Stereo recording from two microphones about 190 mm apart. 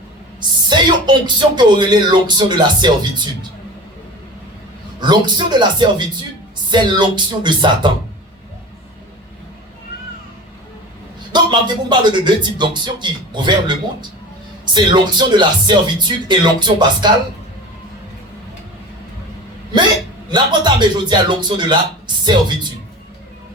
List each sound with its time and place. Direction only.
0.3 s speech: 25° right (ahead or behind)
4.9 s speech: 25° right (ahead or behind)
11.3 s speech: 25° right (ahead or behind)
20.3 s speech: 20° right (ahead or behind)